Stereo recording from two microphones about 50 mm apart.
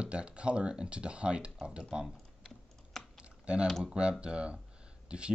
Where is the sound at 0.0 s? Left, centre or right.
Right.